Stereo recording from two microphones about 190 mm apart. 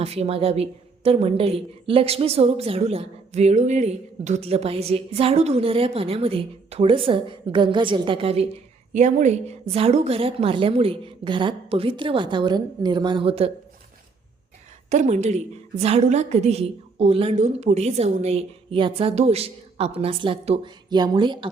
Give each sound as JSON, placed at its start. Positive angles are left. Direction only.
{"t": 0.0, "sound": "a woman's voice", "side_deg": -30}
{"t": 14.8, "sound": "a woman's voice", "side_deg": -40}